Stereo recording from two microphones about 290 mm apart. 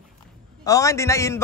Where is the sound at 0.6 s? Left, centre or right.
Centre.